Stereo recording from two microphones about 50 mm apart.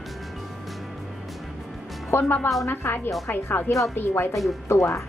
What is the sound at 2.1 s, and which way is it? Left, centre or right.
A woman's voice, left.